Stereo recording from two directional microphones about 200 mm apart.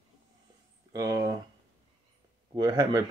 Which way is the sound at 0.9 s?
15° right (ahead or behind).